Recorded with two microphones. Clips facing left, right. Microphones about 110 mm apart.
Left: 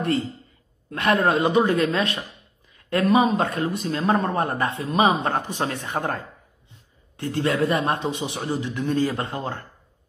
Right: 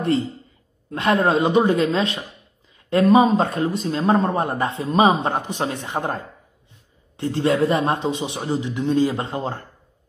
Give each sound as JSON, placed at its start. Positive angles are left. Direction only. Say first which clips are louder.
{"t": 0.8, "sound": "a man's voice", "louder": "right 2 dB", "side_deg": -25}